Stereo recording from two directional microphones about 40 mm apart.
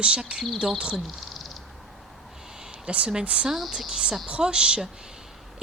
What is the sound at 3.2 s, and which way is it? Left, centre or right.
Speech, right.